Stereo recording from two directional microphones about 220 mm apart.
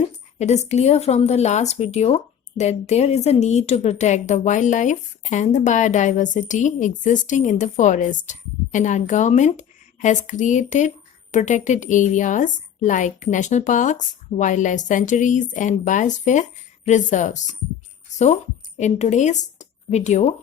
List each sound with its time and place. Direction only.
0.3 s speech: 30° left (ahead or behind)
18.8 s a woman's voice: 30° left (ahead or behind)